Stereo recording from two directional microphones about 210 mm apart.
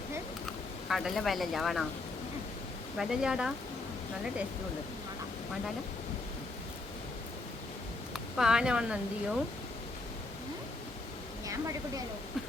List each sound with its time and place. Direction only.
0.9 s speech: centre (ahead or behind)
3.0 s speech: 5° right (ahead or behind)
8.1 s speech: centre (ahead or behind)
11.4 s a woman's voice: 15° right (ahead or behind)